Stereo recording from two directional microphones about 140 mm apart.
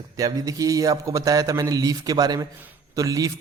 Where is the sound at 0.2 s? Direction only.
25° right (ahead or behind).